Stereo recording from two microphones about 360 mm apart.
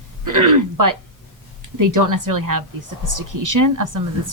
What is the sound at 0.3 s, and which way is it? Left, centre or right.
Speech, right.